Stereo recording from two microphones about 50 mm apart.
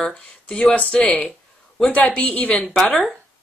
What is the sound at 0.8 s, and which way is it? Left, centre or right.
A woman's voice, left.